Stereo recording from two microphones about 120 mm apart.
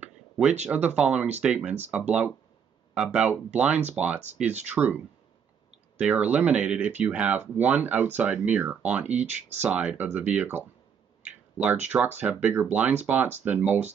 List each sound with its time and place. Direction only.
0.0 s a sound: 10° right (ahead or behind)
0.7 s speech: 10° right (ahead or behind)
9.1 s speech: 70° right (ahead or behind)
9.6 s speech: 15° right (ahead or behind)
11.2 s a sound: 10° right (ahead or behind)
11.9 s speech: 15° right (ahead or behind)